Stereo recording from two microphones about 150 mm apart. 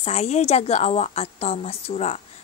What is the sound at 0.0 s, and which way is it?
A woman's voice, 45° left (ahead or behind).